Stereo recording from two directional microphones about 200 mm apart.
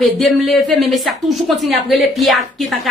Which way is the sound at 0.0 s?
Centre (ahead or behind).